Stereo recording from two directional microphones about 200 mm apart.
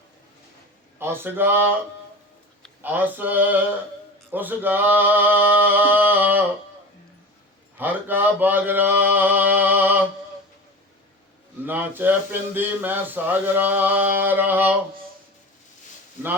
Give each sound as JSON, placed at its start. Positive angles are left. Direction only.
{"t": 0.9, "sound": "speech", "side_deg": -10}
{"t": 2.8, "sound": "speech", "side_deg": -10}
{"t": 7.8, "sound": "speech", "side_deg": -10}
{"t": 11.6, "sound": "speech", "side_deg": -10}